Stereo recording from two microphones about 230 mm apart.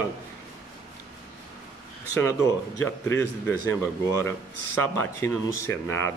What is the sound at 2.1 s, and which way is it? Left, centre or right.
Speech, centre.